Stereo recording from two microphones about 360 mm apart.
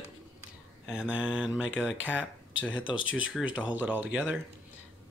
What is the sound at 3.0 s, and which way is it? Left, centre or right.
Speech, left.